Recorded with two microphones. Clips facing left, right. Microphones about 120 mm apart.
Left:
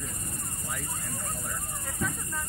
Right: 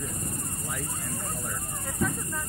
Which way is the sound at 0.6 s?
Centre (ahead or behind).